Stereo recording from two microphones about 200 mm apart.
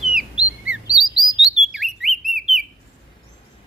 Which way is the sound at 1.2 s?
20° left (ahead or behind).